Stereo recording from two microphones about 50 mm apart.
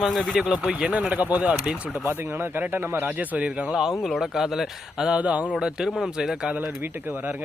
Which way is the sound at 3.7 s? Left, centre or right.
Centre.